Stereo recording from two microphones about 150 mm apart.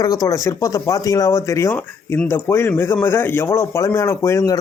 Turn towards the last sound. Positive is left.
turn(degrees=20)  # may be behind; listen again after turning